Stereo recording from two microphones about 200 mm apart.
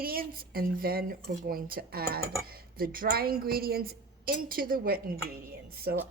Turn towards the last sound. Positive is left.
turn(degrees=-50)  # may be behind; listen again after turning